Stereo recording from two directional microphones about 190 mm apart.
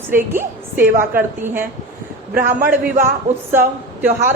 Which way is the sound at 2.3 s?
50° right (ahead or behind).